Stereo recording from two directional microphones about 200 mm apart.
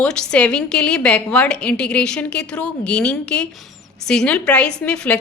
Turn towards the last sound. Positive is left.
turn(degrees=5)  # may be behind; listen again after turning